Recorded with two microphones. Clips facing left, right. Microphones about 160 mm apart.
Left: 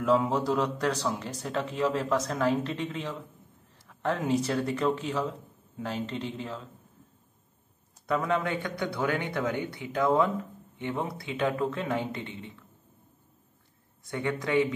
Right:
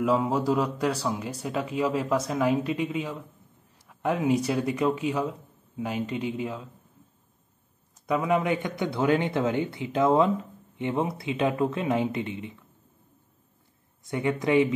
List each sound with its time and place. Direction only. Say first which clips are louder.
0.0 s speech: right 1 dB; 10° right (ahead or behind)
8.1 s a man's voice: right 3 dB; 10° right (ahead or behind)
14.0 s a man's voice: right 5 dB; 20° right (ahead or behind)